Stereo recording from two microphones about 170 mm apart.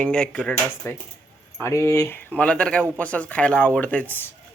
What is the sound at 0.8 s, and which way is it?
Speech, 15° left (ahead or behind).